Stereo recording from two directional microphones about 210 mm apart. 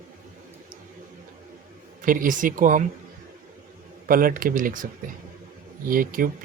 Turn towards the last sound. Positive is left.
turn(degrees=-40)  # may be behind; listen again after turning